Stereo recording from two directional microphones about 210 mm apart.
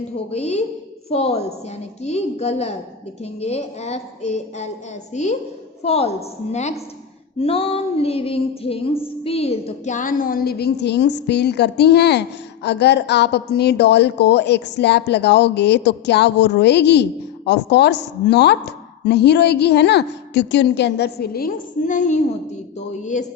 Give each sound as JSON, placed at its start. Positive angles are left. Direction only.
{"t": 0.3, "sound": "female singing", "side_deg": 30}
{"t": 5.8, "sound": "a woman's voice", "side_deg": 30}
{"t": 7.3, "sound": "female singing", "side_deg": 25}
{"t": 12.6, "sound": "a woman's voice", "side_deg": 55}
{"t": 22.9, "sound": "female singing", "side_deg": 35}